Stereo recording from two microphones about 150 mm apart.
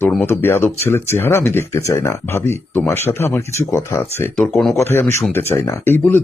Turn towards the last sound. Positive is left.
turn(degrees=15)  # may be behind; listen again after turning